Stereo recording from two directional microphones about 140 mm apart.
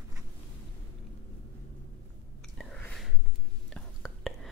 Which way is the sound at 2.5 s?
5° left (ahead or behind).